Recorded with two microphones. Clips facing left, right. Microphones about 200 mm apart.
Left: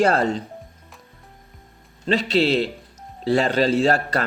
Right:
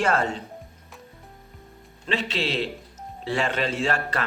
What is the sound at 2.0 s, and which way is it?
Speech, 40° left (ahead or behind).